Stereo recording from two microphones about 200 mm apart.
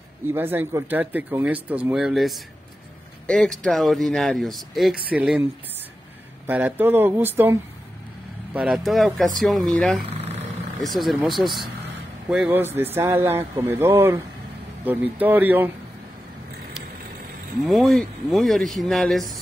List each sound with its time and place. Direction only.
0.3 s speech: 10° right (ahead or behind)
6.4 s speech: 10° right (ahead or behind)
8.5 s speech: 5° right (ahead or behind)
10.0 s a sound: 30° right (ahead or behind)
11.0 s speech: centre (ahead or behind)
17.6 s speech: centre (ahead or behind)